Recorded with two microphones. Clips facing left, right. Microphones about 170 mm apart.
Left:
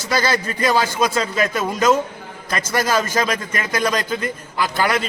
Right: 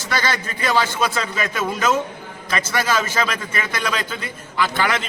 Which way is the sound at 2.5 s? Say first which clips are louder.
Left 2 dB; 40° left (ahead or behind).